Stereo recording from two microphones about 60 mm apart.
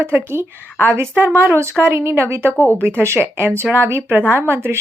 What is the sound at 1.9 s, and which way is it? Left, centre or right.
Speech, right.